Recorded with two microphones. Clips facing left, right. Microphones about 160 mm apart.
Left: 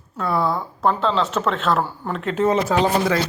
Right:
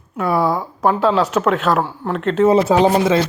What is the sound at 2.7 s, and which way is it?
Speech, 20° right (ahead or behind).